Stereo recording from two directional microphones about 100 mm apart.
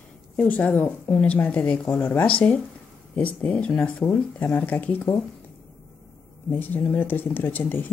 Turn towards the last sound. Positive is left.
turn(degrees=20)  # may be behind; listen again after turning